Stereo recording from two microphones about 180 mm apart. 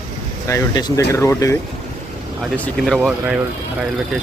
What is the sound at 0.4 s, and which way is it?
Speech, 20° left (ahead or behind).